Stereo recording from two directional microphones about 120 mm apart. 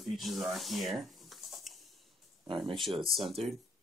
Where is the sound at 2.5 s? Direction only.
45° right (ahead or behind).